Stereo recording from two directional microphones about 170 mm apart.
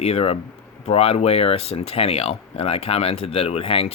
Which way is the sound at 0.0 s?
35° left (ahead or behind).